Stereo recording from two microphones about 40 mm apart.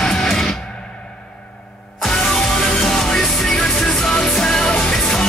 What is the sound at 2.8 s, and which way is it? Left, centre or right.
Music, centre.